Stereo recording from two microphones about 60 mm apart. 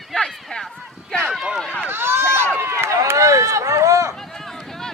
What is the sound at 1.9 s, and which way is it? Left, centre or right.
Run, right.